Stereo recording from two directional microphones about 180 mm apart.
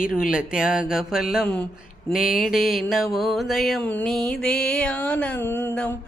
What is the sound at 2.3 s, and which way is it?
Mantra, 50° left (ahead or behind).